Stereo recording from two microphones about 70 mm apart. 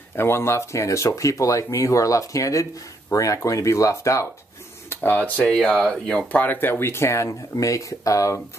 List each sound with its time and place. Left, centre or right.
0.1 s speech: left
4.8 s a sound: left
5.5 s speech: centre
6.4 s speech: left